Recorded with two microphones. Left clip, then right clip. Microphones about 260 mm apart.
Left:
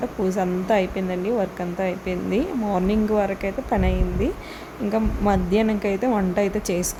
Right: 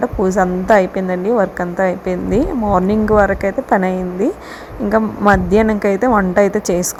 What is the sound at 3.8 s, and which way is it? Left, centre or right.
Speech, right.